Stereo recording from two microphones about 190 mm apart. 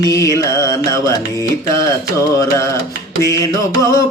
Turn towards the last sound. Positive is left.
turn(degrees=15)  # may be behind; listen again after turning